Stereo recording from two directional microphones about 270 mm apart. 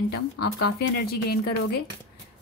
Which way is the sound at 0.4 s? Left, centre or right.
Left.